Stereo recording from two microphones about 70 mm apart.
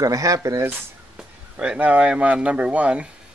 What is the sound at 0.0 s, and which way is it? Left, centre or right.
Speech, right.